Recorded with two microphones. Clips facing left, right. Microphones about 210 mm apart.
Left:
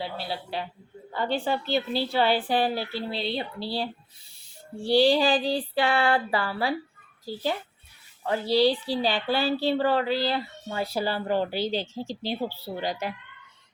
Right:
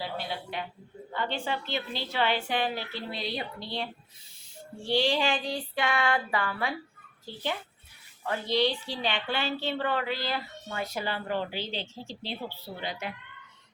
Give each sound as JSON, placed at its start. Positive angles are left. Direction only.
{"t": 0.0, "sound": "a sound", "side_deg": 30}
{"t": 1.1, "sound": "a woman's voice", "side_deg": 35}
{"t": 8.2, "sound": "a woman's voice", "side_deg": 30}